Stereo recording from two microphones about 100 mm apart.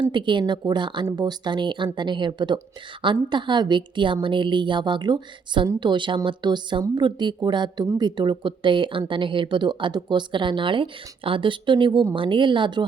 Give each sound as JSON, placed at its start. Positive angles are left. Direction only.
{"t": 0.0, "sound": "speech", "side_deg": -50}